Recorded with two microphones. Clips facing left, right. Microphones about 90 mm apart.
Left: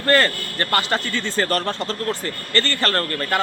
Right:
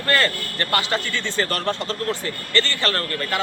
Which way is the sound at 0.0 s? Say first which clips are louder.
Left 3 dB; 35° left (ahead or behind).